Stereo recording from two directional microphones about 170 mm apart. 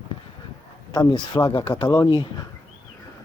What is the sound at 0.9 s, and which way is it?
Speech, 25° left (ahead or behind).